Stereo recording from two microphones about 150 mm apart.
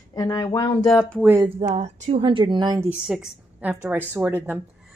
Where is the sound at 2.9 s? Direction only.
5° right (ahead or behind).